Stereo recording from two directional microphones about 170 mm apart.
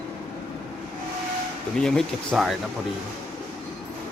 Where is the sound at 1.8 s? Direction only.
5° left (ahead or behind).